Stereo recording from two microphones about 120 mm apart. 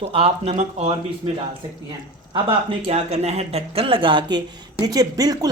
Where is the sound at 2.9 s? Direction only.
60° right (ahead or behind); by 5.5 s 35° right (ahead or behind).